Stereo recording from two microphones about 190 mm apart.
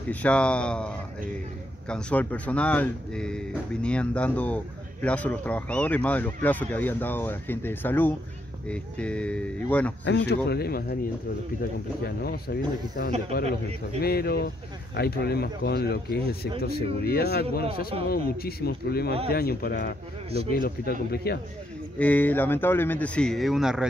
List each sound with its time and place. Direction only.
0.1 s speech: 5° left (ahead or behind)
10.0 s speech: 65° left (ahead or behind)
12.0 s speech: 55° left (ahead or behind)
14.0 s speech: 55° left (ahead or behind)
21.9 s speech: 10° left (ahead or behind)